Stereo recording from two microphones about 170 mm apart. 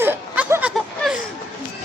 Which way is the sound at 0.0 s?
10° right (ahead or behind).